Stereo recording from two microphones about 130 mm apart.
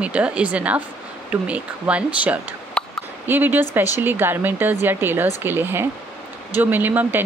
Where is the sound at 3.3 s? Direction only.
15° right (ahead or behind).